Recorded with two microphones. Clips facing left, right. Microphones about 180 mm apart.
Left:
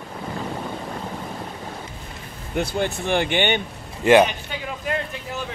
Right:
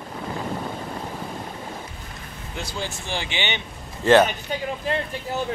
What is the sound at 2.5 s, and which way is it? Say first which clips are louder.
Speech: left 8 dB; 60° left (ahead or behind).